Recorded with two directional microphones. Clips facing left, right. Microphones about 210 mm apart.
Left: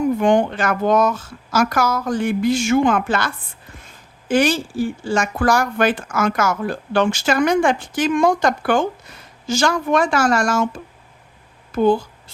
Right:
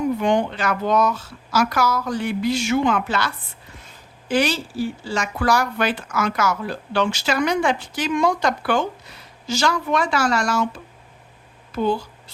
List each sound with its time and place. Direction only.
0.2 s speech: 50° left (ahead or behind)